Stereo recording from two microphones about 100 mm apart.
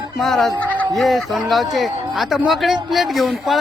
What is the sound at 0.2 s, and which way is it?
A man's voice, centre (ahead or behind).